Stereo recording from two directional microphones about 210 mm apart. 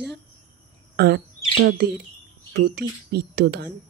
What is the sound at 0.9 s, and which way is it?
Speech, 50° right (ahead or behind).